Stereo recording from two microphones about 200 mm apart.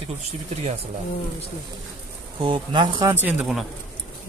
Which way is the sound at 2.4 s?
25° right (ahead or behind).